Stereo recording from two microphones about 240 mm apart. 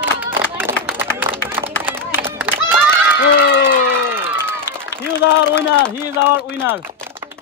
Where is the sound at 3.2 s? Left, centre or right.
Left.